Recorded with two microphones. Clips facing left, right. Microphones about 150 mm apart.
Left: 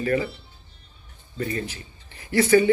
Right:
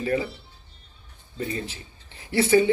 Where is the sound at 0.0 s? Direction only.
20° right (ahead or behind).